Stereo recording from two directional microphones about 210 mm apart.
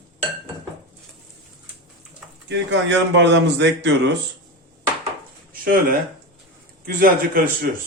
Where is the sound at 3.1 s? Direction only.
55° right (ahead or behind).